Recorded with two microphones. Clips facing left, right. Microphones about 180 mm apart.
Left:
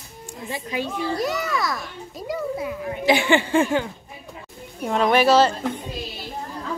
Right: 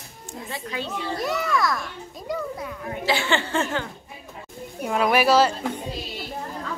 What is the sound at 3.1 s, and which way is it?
Speech, 15° left (ahead or behind).